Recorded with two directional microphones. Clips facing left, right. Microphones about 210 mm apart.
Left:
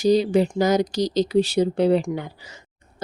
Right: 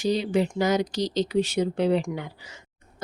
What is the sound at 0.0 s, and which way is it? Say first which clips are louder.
A woman's voice: left 6 dB; 40° left (ahead or behind).